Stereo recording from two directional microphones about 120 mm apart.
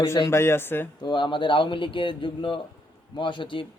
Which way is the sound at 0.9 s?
40° left (ahead or behind).